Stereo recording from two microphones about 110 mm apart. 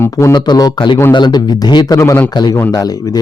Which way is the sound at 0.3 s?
40° left (ahead or behind).